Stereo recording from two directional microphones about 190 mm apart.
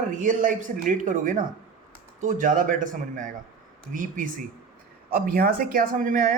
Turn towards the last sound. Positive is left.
turn(degrees=-45)  # may be behind; listen again after turning